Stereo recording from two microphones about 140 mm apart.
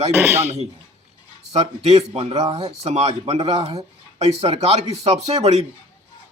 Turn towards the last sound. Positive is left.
turn(degrees=-50)  # may be behind; listen again after turning